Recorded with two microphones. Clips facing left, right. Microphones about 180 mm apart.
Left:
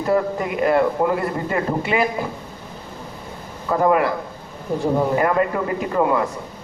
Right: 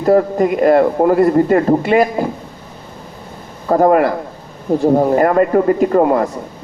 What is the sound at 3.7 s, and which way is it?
A man's voice, 45° right (ahead or behind).